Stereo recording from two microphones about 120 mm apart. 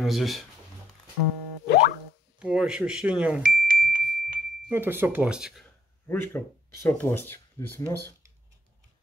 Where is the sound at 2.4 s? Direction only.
5° right (ahead or behind).